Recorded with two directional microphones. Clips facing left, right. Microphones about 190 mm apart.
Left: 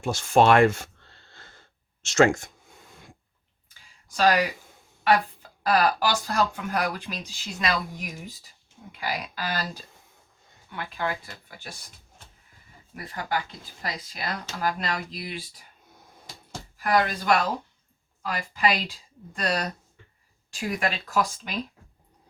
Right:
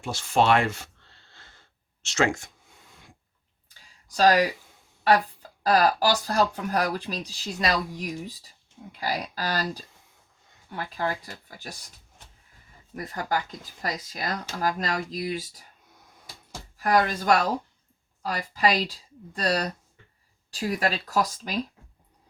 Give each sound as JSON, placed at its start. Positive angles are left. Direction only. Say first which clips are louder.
{"t": 0.0, "sound": "a sound", "louder": "left 4 dB", "side_deg": 50}
{"t": 4.2, "sound": "speech", "louder": "right 2 dB", "side_deg": -35}
{"t": 13.0, "sound": "speech", "louder": "right 2 dB", "side_deg": -40}
{"t": 16.7, "sound": "speech", "louder": "right 1 dB", "side_deg": -40}